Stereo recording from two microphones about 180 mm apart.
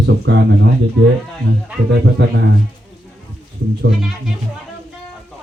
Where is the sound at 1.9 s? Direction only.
70° right (ahead or behind).